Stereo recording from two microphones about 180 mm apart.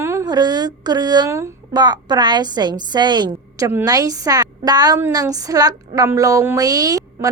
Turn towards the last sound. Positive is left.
turn(degrees=-20)  # may be behind; listen again after turning